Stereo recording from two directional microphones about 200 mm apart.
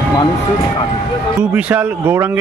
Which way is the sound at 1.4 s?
5° right (ahead or behind).